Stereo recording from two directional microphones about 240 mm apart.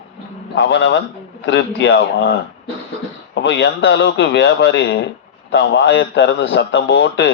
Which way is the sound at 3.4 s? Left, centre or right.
Left.